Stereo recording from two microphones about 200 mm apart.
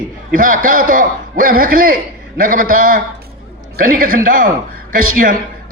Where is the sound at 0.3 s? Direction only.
40° right (ahead or behind).